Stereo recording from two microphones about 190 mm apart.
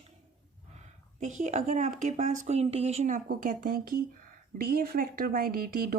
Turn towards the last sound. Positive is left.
turn(degrees=-50)  # may be behind; listen again after turning